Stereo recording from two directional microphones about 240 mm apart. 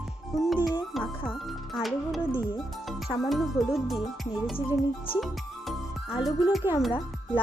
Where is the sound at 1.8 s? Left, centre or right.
Centre.